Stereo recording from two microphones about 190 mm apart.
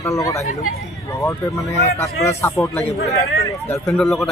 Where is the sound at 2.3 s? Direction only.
15° left (ahead or behind).